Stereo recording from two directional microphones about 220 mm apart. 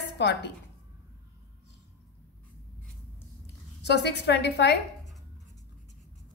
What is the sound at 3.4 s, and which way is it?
Speech, 50° left (ahead or behind).